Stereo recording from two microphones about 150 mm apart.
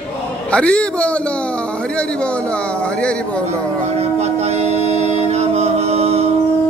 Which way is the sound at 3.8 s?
45° right (ahead or behind).